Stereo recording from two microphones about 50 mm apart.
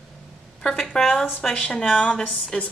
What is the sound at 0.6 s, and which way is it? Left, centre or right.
Speech, centre.